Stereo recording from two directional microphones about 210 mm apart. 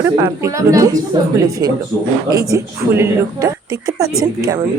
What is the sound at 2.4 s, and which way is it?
A woman's voice, 15° right (ahead or behind).